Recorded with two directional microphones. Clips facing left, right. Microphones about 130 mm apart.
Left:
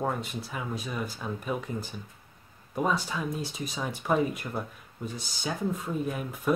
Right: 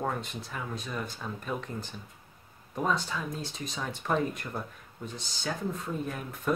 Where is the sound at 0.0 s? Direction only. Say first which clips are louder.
Left 2 dB; 5° left (ahead or behind).